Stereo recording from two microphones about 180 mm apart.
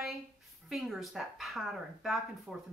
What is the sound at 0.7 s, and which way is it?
Speech, centre (ahead or behind).